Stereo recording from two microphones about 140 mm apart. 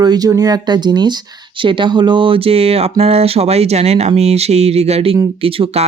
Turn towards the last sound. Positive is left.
turn(degrees=-45)  # may be behind; listen again after turning